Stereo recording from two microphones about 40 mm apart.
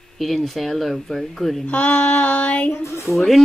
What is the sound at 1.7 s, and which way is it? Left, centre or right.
Child singing, left.